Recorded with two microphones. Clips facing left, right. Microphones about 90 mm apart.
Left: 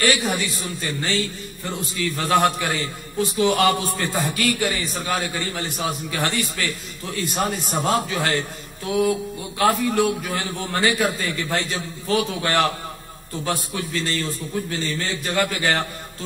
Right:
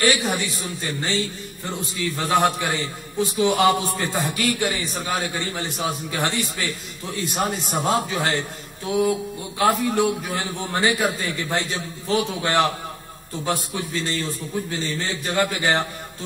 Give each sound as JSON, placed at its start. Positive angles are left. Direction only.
{"t": 0.0, "sound": "a man's voice", "side_deg": -15}